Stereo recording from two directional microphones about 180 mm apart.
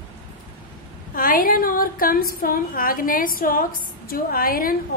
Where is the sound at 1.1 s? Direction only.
50° left (ahead or behind).